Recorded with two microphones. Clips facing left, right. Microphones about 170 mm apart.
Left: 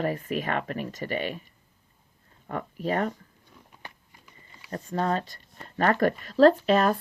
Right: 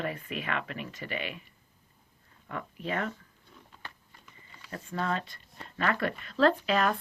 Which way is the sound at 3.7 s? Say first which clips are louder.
Left 2 dB; 15° left (ahead or behind).